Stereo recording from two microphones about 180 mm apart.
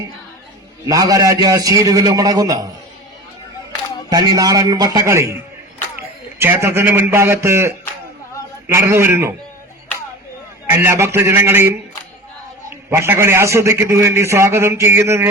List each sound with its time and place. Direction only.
0.9 s a man's voice: 20° right (ahead or behind)
4.1 s a man's voice: 20° right (ahead or behind)
6.4 s a man's voice: 15° right (ahead or behind)
10.7 s a man's voice: 15° right (ahead or behind)
12.7 s a man's voice: 15° right (ahead or behind)